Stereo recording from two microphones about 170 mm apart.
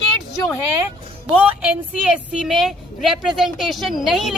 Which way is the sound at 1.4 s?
10° right (ahead or behind).